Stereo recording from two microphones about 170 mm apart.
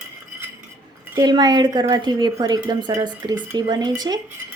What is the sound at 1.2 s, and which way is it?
A woman's voice, 25° right (ahead or behind).